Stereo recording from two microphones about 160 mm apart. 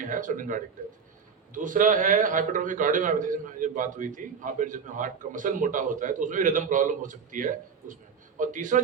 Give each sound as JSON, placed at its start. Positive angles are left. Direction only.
{"t": 0.0, "sound": "a man's voice", "side_deg": -55}